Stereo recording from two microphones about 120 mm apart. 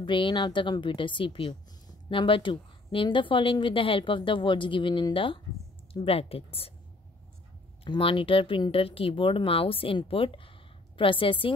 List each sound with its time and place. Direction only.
0.0 s speech: 40° left (ahead or behind)
7.8 s speech: 50° left (ahead or behind)